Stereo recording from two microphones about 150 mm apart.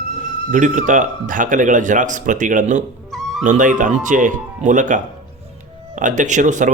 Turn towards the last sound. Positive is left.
turn(degrees=-55)  # may be behind; listen again after turning